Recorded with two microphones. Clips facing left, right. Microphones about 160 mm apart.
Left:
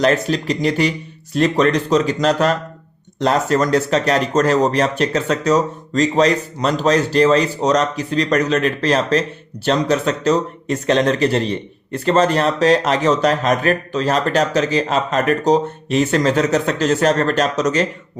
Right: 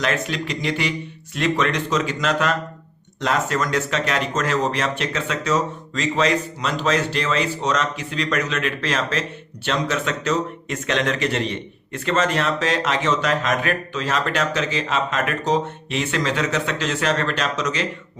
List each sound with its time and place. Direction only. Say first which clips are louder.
0.0 s speech: left 7 dB; 35° left (ahead or behind)